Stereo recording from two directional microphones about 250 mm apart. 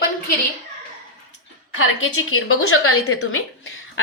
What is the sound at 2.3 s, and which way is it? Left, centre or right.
A woman's voice, left.